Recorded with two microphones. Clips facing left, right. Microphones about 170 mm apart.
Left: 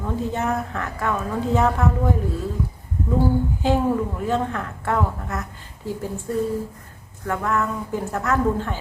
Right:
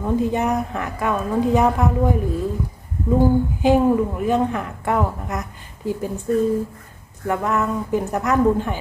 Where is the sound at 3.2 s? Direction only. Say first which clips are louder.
Right 4 dB; 15° right (ahead or behind).